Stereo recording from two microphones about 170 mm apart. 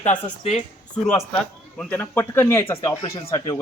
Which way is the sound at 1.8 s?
10° left (ahead or behind).